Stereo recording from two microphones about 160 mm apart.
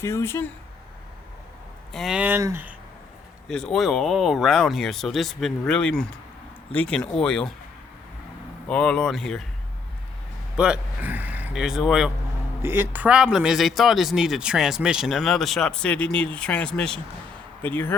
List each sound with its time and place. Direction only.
0.0 s speech: 15° left (ahead or behind)
1.9 s speech: centre (ahead or behind)
3.5 s speech: 5° left (ahead or behind)
8.6 s speech: 5° left (ahead or behind)
10.6 s speech: 10° right (ahead or behind)
12.6 s speech: 15° right (ahead or behind); by 17.9 s 10° left (ahead or behind)